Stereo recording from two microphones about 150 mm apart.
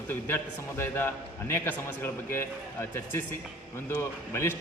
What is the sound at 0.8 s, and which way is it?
A man's voice, 15° left (ahead or behind).